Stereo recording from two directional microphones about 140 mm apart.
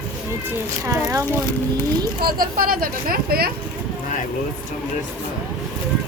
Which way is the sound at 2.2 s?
90° right.